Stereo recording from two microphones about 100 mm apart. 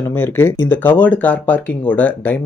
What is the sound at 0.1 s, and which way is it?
Speech, 20° left (ahead or behind).